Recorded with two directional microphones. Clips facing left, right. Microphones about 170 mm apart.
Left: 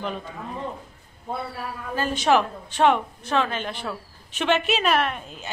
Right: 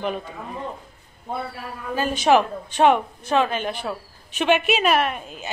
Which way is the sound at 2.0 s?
15° right (ahead or behind).